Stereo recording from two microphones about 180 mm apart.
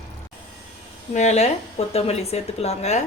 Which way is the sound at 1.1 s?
40° left (ahead or behind).